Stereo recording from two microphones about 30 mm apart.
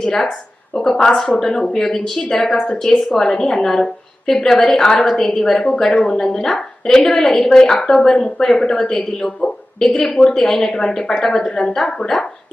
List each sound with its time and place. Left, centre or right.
0.0 s a woman's voice: centre
11.2 s a woman's voice: centre
11.4 s a woman's voice: left
11.7 s a woman's voice: centre